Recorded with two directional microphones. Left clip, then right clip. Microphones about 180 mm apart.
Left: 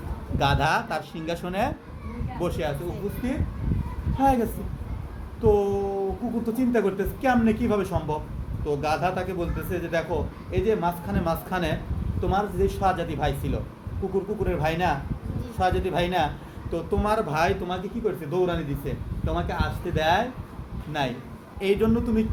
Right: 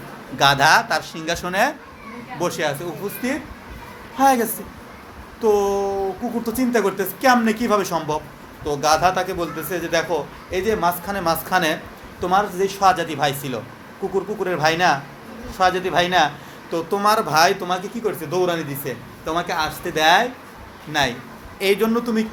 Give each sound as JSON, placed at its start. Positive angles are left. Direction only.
{"t": 0.3, "sound": "speech", "side_deg": 15}
{"t": 4.2, "sound": "speech", "side_deg": 10}
{"t": 5.4, "sound": "a sound", "side_deg": 10}
{"t": 6.4, "sound": "speech", "side_deg": 10}